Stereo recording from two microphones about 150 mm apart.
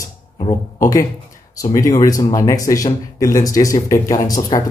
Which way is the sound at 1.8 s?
25° left (ahead or behind).